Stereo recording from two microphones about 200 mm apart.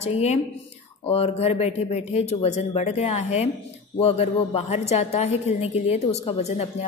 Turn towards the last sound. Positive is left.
turn(degrees=35)  # may be behind; listen again after turning